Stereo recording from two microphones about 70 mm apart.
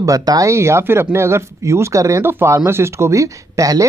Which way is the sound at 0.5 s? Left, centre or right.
Right.